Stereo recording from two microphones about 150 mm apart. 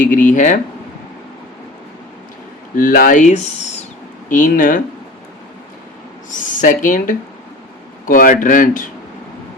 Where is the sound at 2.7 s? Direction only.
65° left (ahead or behind).